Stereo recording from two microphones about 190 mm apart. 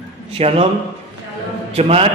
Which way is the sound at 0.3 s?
30° right (ahead or behind).